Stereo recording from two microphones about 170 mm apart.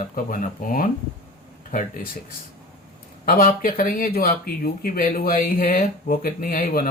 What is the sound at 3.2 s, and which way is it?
Speech, 55° left (ahead or behind).